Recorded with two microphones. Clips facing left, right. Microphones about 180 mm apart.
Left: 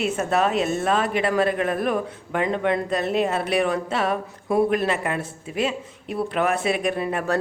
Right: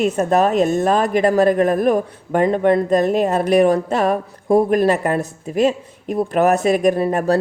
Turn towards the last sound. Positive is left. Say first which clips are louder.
# right 7 dB
turn(degrees=-40)  # may be behind; listen again after turning